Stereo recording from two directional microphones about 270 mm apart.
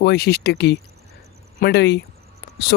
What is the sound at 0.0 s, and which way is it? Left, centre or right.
Speech, left.